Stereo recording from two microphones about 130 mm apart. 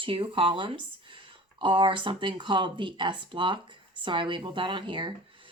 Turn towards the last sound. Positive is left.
turn(degrees=-40)  # may be behind; listen again after turning